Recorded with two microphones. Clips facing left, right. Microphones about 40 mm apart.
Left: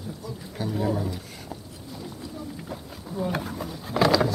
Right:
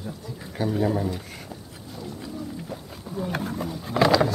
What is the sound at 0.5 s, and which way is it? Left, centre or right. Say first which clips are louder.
Speech: right 3 dB; centre.